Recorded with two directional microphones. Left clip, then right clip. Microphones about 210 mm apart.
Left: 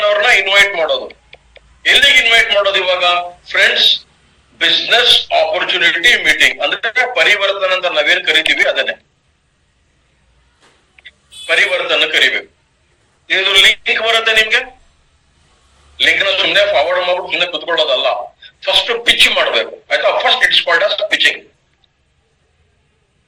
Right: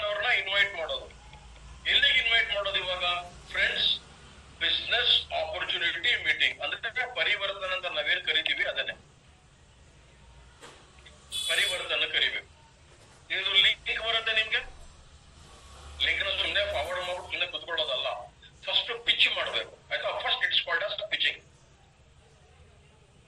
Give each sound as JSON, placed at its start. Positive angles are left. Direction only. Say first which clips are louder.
{"t": 0.0, "sound": "a sound", "louder": "left 17 dB", "side_deg": 65}
{"t": 1.8, "sound": "a man's voice", "louder": "left 15 dB", "side_deg": 65}
{"t": 11.4, "sound": "a man's voice", "louder": "left 15 dB", "side_deg": 60}
{"t": 16.0, "sound": "a man's voice", "louder": "left 16 dB", "side_deg": 65}